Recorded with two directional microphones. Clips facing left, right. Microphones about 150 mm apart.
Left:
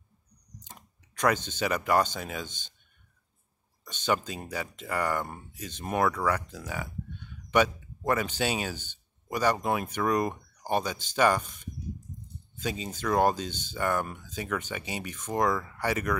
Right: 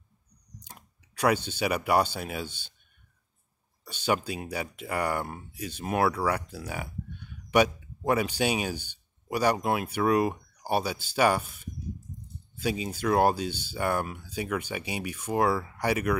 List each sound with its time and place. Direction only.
0.6 s speech: 10° right (ahead or behind)
3.8 s speech: 10° right (ahead or behind)